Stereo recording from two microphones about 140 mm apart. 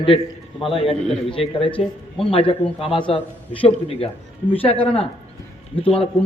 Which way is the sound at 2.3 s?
40° left (ahead or behind).